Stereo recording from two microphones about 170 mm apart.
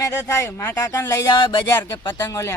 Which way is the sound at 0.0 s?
15° left (ahead or behind).